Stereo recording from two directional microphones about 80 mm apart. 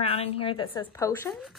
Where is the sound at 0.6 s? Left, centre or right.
Left.